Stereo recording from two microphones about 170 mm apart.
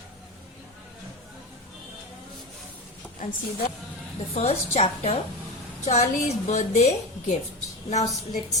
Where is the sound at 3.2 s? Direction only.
50° left (ahead or behind).